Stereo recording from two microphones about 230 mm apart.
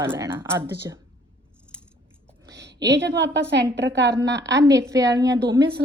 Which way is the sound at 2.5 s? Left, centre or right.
Right.